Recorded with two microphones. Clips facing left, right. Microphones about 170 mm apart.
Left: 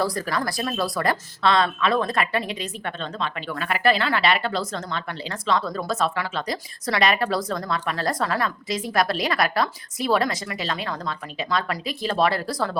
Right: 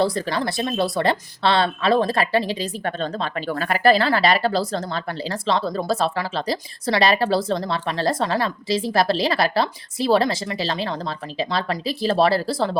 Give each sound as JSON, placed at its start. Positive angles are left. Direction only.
{"t": 0.0, "sound": "speech", "side_deg": -25}